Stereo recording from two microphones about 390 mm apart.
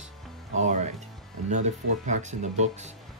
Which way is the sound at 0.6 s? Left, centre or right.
Centre.